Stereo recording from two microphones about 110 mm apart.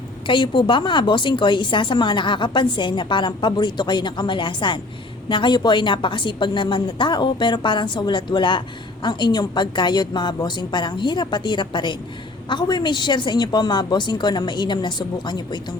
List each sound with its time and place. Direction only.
0.3 s a woman's voice: 45° left (ahead or behind)